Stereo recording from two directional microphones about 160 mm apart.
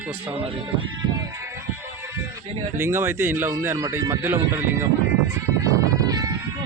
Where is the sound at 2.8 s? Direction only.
15° right (ahead or behind).